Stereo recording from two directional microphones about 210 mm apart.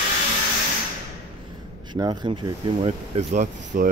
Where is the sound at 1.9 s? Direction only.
20° right (ahead or behind).